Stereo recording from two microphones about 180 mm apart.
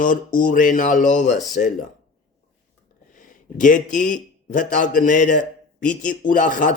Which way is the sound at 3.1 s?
45° left (ahead or behind).